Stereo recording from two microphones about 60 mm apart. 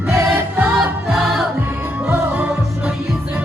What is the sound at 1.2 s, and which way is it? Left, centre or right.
Music, centre.